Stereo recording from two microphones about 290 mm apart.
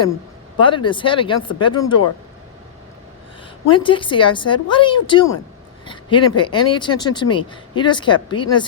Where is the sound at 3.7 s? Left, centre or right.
Centre.